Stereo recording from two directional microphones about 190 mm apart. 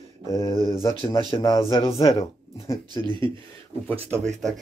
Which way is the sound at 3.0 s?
25° right (ahead or behind).